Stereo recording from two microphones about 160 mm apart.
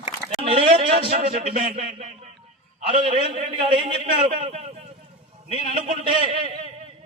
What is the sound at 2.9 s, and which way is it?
A man's voice, 35° right (ahead or behind).